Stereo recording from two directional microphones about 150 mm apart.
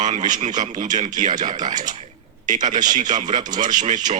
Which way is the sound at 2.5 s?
55° right (ahead or behind).